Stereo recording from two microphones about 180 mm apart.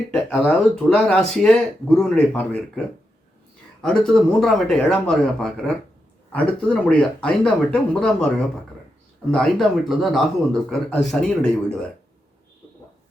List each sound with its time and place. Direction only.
0.1 s speech: 5° left (ahead or behind)